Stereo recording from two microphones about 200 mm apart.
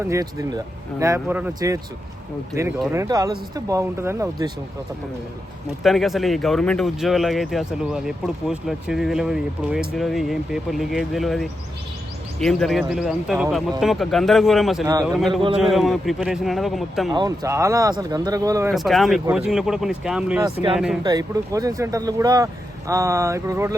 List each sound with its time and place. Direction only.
0.0 s speech: 15° right (ahead or behind)
5.8 s speech: centre (ahead or behind)
15.3 s speech: 25° right (ahead or behind)
15.5 s speech: centre (ahead or behind)
17.1 s speech: 20° right (ahead or behind)
18.7 s speech: centre (ahead or behind)
20.4 s speech: 25° right (ahead or behind)